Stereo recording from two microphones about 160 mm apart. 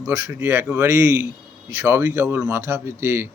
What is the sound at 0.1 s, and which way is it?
A man's voice, 15° right (ahead or behind).